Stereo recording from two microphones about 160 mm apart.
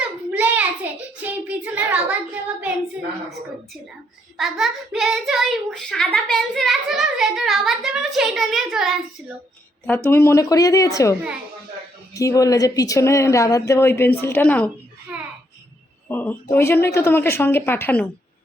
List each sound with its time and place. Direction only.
0.3 s child singing: 10° right (ahead or behind)
4.4 s speech: centre (ahead or behind)
10.1 s speech: 15° left (ahead or behind)
15.1 s a sound: 10° right (ahead or behind)
16.0 s speech: 10° left (ahead or behind)